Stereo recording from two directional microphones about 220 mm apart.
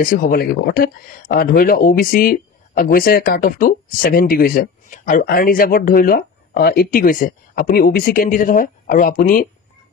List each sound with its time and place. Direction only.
0.0 s speech: 40° left (ahead or behind)